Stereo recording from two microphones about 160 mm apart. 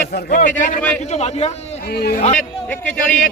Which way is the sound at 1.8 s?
80° left.